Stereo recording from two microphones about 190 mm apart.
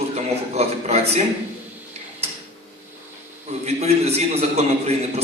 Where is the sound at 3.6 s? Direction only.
35° right (ahead or behind).